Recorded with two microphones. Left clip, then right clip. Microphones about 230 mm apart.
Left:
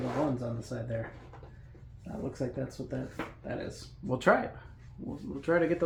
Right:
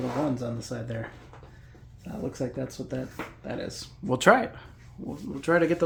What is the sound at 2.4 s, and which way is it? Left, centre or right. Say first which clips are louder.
Speech: right 3 dB; right.